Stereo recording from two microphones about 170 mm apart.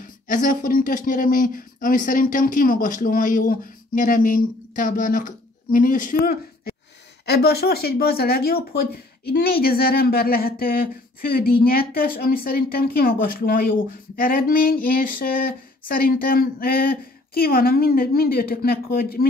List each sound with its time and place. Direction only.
0.0 s speech: 50° left (ahead or behind)
7.2 s speech: 70° left (ahead or behind)